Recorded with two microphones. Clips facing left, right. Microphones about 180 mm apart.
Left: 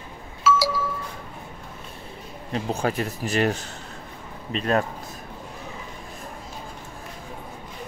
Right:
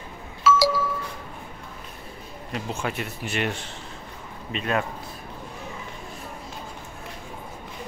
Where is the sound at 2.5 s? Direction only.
35° left (ahead or behind).